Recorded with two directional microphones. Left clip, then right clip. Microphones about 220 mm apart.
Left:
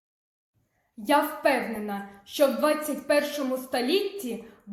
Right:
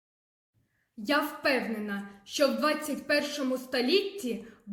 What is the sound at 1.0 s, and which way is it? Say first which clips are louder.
A woman's voice: left 5 dB; 45° right (ahead or behind).